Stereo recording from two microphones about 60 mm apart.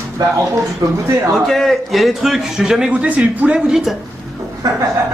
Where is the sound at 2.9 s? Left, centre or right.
Right.